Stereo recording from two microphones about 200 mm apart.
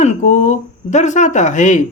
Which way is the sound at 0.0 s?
35° left (ahead or behind).